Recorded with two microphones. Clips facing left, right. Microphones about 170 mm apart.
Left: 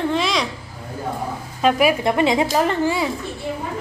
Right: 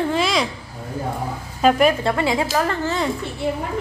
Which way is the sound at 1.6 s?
10° left (ahead or behind).